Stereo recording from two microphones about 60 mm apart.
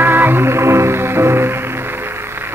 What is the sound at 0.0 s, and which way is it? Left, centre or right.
Music, right.